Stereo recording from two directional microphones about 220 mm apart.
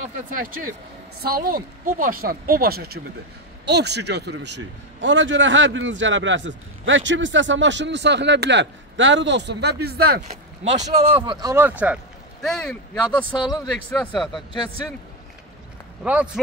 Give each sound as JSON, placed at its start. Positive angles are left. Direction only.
{"t": 0.3, "sound": "a man's voice", "side_deg": -40}
{"t": 10.8, "sound": "speech", "side_deg": -20}
{"t": 11.4, "sound": "a man's voice", "side_deg": -10}
{"t": 16.0, "sound": "a man's voice", "side_deg": -5}